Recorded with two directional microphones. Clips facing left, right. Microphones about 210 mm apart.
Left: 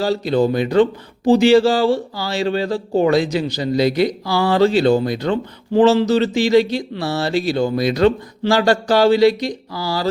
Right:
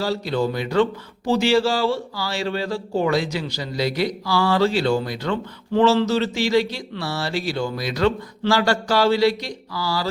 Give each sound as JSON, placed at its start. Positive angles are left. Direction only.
{"t": 0.0, "sound": "speech", "side_deg": 20}